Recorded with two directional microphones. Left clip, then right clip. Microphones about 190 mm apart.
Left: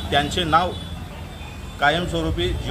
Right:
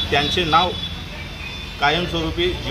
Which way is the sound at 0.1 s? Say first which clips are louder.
Right 1 dB; 25° left (ahead or behind).